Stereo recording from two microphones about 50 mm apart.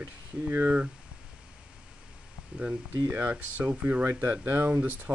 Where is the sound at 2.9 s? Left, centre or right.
Right.